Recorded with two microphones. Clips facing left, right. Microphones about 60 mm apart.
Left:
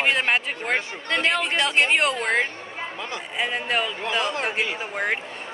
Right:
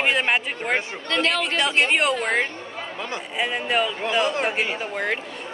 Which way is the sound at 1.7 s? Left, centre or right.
Centre.